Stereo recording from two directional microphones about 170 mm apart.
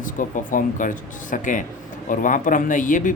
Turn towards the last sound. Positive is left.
turn(degrees=50)  # may be behind; listen again after turning